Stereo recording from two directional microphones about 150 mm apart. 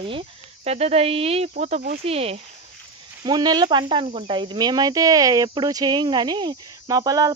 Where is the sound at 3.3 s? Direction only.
30° right (ahead or behind).